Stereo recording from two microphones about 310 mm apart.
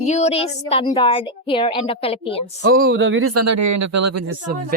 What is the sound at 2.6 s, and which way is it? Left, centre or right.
Speech, right.